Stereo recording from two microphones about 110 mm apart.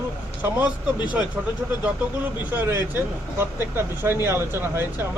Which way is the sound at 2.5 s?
15° right (ahead or behind).